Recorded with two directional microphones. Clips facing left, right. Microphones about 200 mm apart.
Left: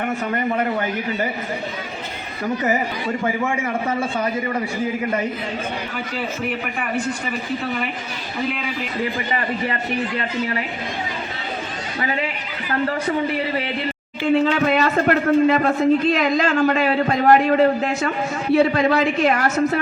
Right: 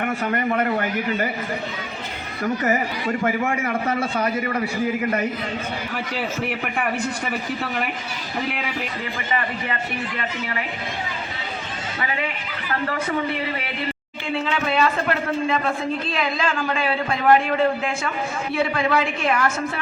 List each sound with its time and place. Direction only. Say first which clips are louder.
3.2 s a man's voice: left 1 dB; 25° left (ahead or behind)
10.2 s a man's voice: left 5 dB; 35° left (ahead or behind)
14.3 s a man's voice: left 7 dB; 40° left (ahead or behind)